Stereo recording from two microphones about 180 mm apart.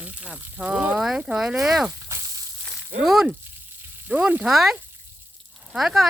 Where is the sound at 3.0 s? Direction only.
Centre (ahead or behind).